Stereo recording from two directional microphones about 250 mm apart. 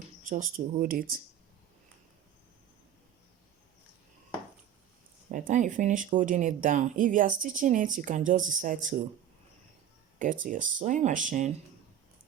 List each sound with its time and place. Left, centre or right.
0.3 s speech: right
5.3 s speech: right
10.2 s speech: right